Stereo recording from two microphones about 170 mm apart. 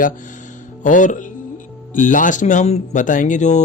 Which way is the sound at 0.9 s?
50° left (ahead or behind).